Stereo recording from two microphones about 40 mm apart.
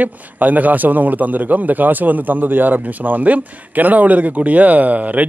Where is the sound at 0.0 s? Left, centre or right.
Right.